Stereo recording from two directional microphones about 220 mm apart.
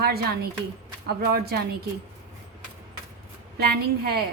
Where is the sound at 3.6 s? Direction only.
45° right (ahead or behind).